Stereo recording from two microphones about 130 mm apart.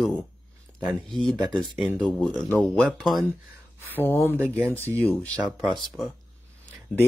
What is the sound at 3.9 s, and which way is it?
Speech, 15° left (ahead or behind).